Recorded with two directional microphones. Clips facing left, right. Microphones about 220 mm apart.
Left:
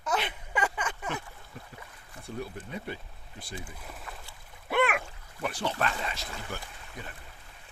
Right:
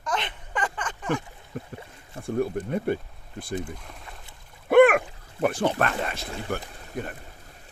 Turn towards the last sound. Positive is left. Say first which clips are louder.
# right 10 dB
turn(degrees=-55)  # may be behind; listen again after turning